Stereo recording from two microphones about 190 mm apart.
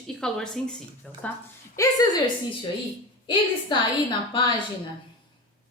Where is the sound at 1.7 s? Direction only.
20° left (ahead or behind).